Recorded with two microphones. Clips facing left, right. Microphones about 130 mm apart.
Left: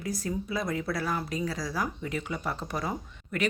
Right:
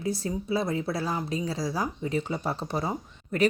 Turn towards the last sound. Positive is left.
turn(degrees=-30)  # may be behind; listen again after turning